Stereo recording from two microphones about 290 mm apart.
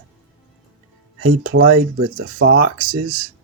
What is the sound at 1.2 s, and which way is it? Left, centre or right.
Speech, right.